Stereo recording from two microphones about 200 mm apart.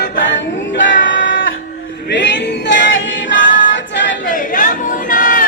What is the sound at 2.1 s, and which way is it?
Singing, 60° left (ahead or behind).